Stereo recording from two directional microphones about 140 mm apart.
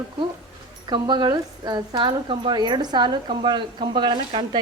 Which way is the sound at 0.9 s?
30° right (ahead or behind).